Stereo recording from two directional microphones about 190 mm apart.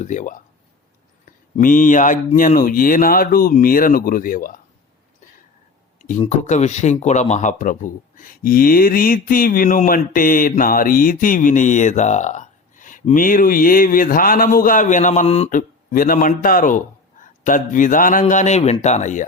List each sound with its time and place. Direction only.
0.0 s speech: 40° left (ahead or behind)
6.2 s speech: 40° left (ahead or behind)